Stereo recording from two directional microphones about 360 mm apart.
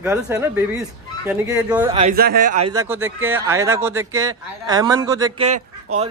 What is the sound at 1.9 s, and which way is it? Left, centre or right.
Speech, right.